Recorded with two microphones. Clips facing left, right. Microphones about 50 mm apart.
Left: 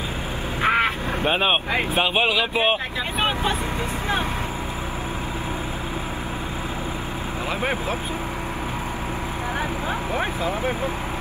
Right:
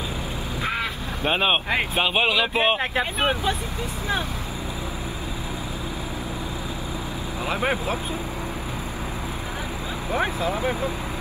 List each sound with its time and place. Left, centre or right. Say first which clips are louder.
0.6 s a sound: left 8 dB; left
1.2 s speech: even; centre
7.6 s speech: right 1 dB; centre
10.4 s speech: even; left